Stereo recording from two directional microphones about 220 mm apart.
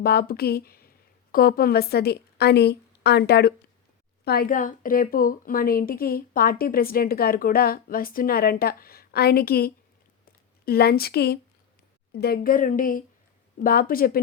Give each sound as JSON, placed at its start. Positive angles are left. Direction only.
{"t": 0.0, "sound": "a woman's voice", "side_deg": 45}